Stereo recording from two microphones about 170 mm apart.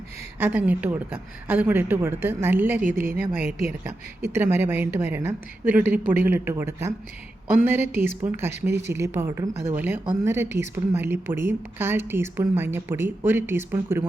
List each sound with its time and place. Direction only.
0.3 s speech: 10° right (ahead or behind)